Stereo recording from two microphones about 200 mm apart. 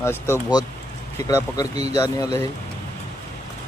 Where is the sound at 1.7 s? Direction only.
30° right (ahead or behind).